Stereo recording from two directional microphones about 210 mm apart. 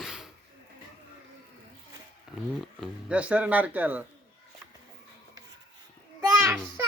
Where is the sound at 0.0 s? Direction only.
Centre (ahead or behind).